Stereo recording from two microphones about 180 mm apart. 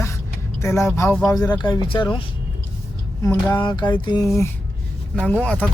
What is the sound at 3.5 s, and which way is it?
Speech, 25° left (ahead or behind).